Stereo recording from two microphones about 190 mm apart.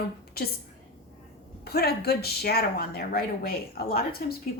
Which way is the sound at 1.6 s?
55° left (ahead or behind).